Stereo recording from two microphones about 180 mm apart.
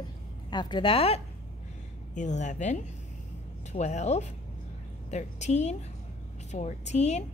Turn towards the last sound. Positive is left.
turn(degrees=40)  # may be behind; listen again after turning